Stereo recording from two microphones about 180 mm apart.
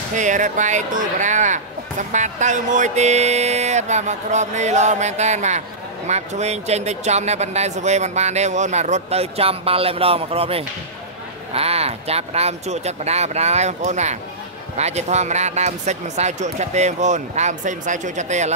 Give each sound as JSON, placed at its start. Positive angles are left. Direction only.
{"t": 0.1, "sound": "speech", "side_deg": -45}